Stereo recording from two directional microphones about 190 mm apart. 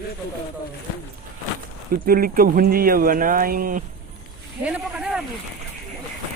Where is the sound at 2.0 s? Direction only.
50° right (ahead or behind).